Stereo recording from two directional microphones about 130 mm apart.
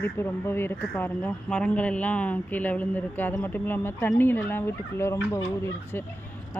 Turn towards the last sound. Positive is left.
turn(degrees=20)  # may be behind; listen again after turning